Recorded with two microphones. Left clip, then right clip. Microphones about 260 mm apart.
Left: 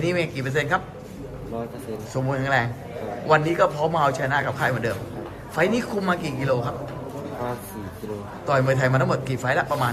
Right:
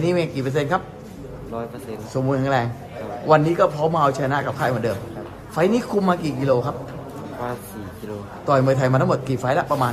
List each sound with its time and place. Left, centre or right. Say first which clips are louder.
0.0 s a man's voice: right 3 dB; centre
2.2 s a man's voice: right 2 dB; centre
8.4 s a man's voice: right 3 dB; centre